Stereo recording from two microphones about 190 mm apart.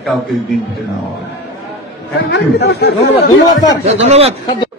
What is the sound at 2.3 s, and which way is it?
Speech, 60° left (ahead or behind).